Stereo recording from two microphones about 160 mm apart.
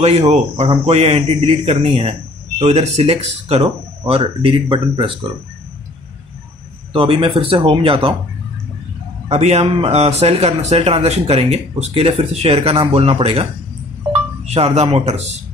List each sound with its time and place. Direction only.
0.3 s a man's voice: 45° right (ahead or behind)
6.9 s a man's voice: 35° right (ahead or behind)
9.3 s a man's voice: 40° right (ahead or behind)